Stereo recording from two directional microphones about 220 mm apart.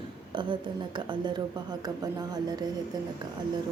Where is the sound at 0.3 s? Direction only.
20° right (ahead or behind).